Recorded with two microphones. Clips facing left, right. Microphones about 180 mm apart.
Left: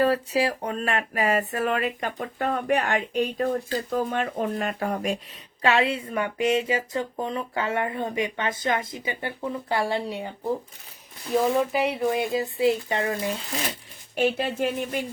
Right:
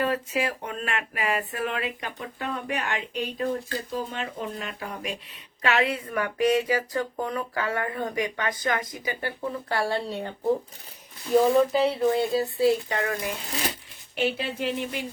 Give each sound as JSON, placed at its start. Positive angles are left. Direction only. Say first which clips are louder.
{"t": 0.0, "sound": "speech", "louder": "left 4 dB", "side_deg": 35}
{"t": 5.6, "sound": "speech", "louder": "left 2 dB", "side_deg": 30}
{"t": 11.5, "sound": "speech", "louder": "right 3 dB", "side_deg": 15}
{"t": 14.2, "sound": "speech", "louder": "left 4 dB", "side_deg": 45}